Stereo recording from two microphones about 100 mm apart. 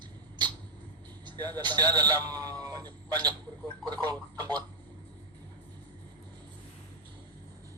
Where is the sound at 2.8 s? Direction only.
45° right (ahead or behind).